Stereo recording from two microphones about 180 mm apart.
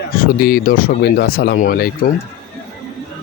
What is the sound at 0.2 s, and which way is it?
Speech, 55° left (ahead or behind).